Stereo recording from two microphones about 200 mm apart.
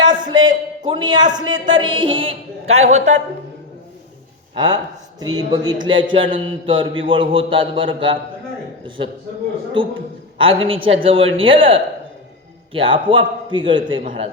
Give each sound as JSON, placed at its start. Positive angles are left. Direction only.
{"t": 0.0, "sound": "a sound", "side_deg": -20}
{"t": 0.9, "sound": "a man's voice", "side_deg": -20}
{"t": 4.5, "sound": "speech", "side_deg": -20}
{"t": 9.8, "sound": "a woman's voice", "side_deg": -25}